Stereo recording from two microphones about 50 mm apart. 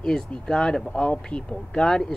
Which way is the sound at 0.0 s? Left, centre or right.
Centre.